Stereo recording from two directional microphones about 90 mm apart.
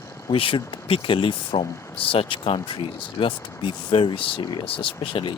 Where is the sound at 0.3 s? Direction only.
75° left (ahead or behind).